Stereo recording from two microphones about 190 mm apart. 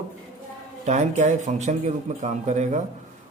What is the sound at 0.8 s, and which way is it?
Speech, 40° right (ahead or behind).